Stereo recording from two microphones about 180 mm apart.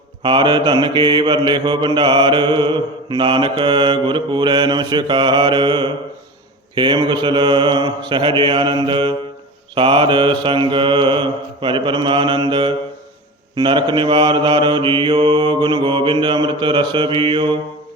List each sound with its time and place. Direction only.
0.2 s mantra: 25° right (ahead or behind)